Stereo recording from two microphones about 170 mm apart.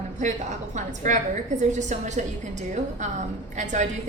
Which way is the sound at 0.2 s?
45° right (ahead or behind).